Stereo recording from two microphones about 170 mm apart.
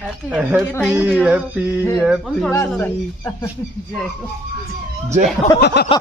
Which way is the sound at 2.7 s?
10° left (ahead or behind).